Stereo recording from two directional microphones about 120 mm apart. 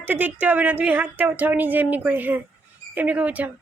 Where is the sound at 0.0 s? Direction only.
15° right (ahead or behind).